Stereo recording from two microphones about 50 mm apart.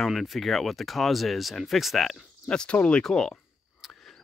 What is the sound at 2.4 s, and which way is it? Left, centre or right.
Speech, centre.